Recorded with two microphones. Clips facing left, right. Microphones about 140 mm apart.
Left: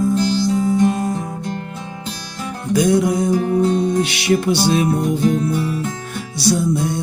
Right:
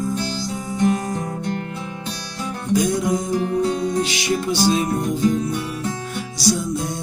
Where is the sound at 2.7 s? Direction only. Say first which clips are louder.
Left 4 dB; 65° left (ahead or behind).